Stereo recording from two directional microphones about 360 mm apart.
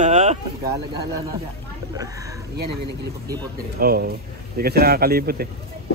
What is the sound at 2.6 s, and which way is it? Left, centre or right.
Speech, right.